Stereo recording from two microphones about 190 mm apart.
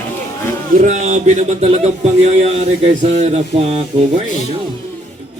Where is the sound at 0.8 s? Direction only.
40° right (ahead or behind).